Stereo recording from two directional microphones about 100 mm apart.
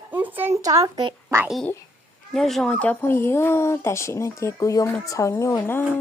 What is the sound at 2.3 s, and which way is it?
Speech, 5° left (ahead or behind).